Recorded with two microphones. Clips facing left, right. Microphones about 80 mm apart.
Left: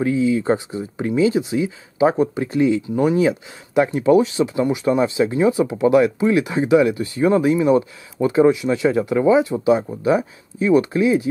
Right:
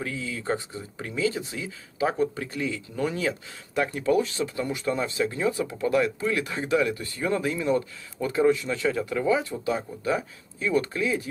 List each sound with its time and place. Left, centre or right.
0.0 s speech: centre